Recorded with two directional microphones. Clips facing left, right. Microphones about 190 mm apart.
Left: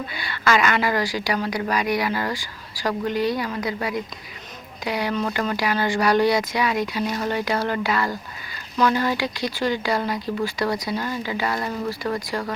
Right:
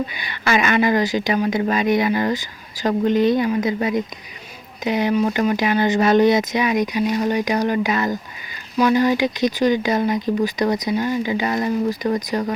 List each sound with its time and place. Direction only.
0.1 s a woman's voice: 20° right (ahead or behind)